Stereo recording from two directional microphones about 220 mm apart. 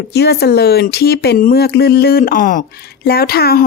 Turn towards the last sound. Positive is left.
turn(degrees=45)  # may be behind; listen again after turning